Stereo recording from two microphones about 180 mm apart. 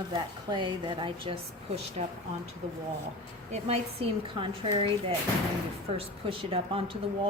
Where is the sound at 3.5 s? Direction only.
35° right (ahead or behind).